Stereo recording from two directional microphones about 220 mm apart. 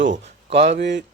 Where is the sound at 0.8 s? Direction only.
50° right (ahead or behind).